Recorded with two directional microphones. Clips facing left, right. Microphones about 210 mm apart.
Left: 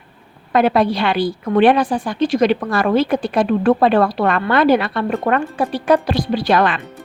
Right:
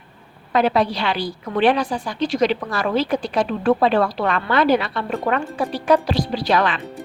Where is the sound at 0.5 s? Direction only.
55° left (ahead or behind).